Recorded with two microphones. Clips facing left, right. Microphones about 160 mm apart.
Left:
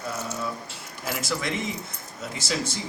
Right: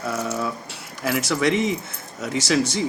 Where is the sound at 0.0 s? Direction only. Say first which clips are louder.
Right 6 dB; 65° right (ahead or behind).